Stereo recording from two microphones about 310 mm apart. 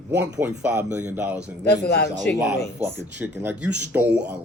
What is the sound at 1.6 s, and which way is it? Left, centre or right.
Speech, left.